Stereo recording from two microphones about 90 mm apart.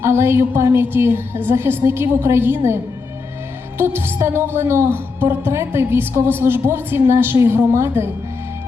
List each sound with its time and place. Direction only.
0.0 s a woman's voice: 30° right (ahead or behind)